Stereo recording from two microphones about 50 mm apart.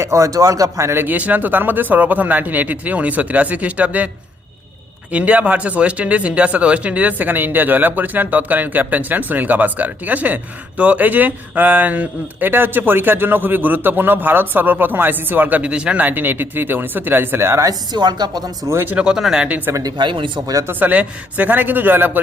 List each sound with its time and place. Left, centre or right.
0.0 s a man's voice: right
1.0 s speech: right
5.1 s speech: right
15.7 s speech: right
16.0 s speech: right
18.9 s speech: centre
19.5 s speech: right
20.7 s speech: right